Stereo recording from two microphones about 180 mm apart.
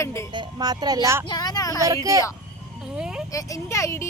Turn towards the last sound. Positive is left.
turn(degrees=15)  # may be behind; listen again after turning